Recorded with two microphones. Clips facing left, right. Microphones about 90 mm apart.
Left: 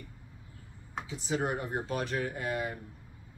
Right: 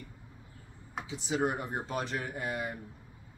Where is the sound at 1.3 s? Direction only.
20° right (ahead or behind).